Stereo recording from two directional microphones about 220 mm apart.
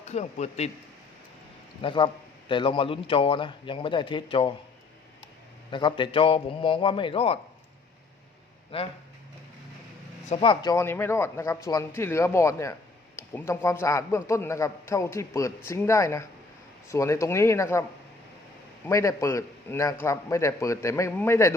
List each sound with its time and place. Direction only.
0.1 s speech: 30° left (ahead or behind)
1.8 s speech: 20° left (ahead or behind)
5.7 s speech: 20° left (ahead or behind)
8.7 s speech: 25° left (ahead or behind)
10.2 s a man's voice: 25° left (ahead or behind)
18.9 s a man's voice: 15° left (ahead or behind)